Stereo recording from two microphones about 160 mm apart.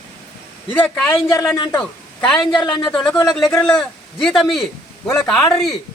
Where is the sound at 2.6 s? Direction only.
30° left (ahead or behind).